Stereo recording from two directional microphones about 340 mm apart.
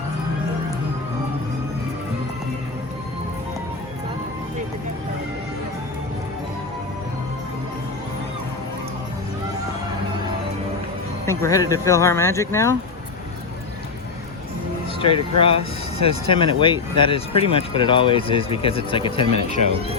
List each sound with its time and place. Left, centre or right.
11.3 s speech: centre
15.0 s speech: centre